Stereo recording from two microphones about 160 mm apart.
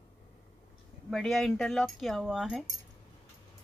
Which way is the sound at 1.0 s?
Centre (ahead or behind).